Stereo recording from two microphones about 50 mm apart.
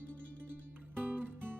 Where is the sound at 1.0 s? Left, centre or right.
Right.